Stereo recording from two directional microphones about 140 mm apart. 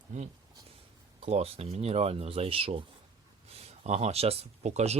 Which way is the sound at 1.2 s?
50° right (ahead or behind).